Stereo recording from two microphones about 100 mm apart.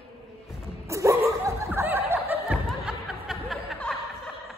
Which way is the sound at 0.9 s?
30° right (ahead or behind).